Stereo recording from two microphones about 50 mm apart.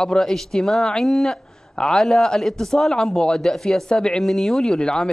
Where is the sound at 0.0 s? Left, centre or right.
Centre.